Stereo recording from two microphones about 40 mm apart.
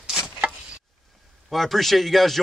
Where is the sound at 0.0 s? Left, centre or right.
Centre.